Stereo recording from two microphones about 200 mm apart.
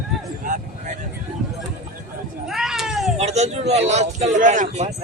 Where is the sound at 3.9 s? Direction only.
35° right (ahead or behind).